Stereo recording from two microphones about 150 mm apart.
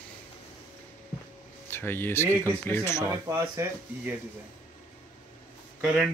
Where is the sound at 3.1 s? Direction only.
15° right (ahead or behind).